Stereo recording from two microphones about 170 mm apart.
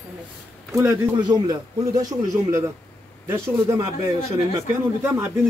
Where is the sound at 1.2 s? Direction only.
25° right (ahead or behind).